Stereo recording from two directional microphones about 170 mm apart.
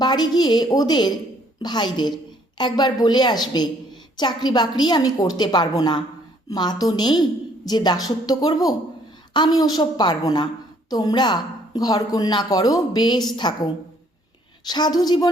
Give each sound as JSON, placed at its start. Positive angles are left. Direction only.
{"t": 0.0, "sound": "a woman's voice", "side_deg": 25}
{"t": 14.7, "sound": "a woman's voice", "side_deg": 25}